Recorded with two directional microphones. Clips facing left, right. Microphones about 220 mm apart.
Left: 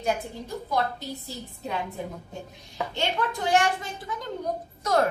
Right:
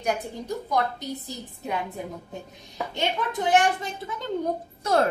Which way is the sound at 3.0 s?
20° right (ahead or behind).